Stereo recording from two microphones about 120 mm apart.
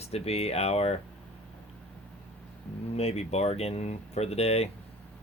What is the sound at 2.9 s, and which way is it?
Speech, 60° left (ahead or behind).